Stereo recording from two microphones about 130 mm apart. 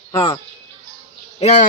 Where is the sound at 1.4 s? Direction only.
65° left (ahead or behind).